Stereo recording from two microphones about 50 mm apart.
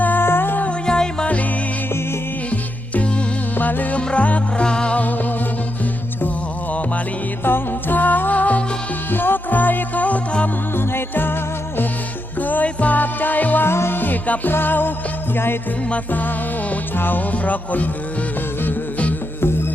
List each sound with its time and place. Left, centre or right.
0.0 s music: left
0.9 s music: centre
2.5 s music: left
3.9 s music: left
7.4 s music: left
9.0 s music: left
10.8 s music: left
12.4 s music: left
13.7 s music: left
16.1 s music: left
19.4 s music: left